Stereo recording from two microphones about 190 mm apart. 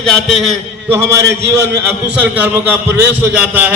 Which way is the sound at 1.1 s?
65° right (ahead or behind).